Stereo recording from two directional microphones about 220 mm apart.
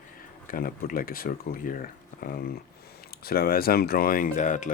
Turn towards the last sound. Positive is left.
turn(degrees=35)  # may be behind; listen again after turning